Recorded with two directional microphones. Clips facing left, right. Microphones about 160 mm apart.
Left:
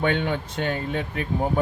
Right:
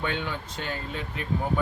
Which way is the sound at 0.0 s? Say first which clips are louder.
Left 7 dB; 60° left (ahead or behind).